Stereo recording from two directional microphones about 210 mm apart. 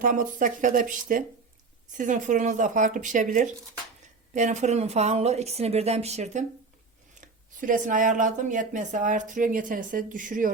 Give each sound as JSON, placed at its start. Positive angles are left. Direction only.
{"t": 0.0, "sound": "speech", "side_deg": -40}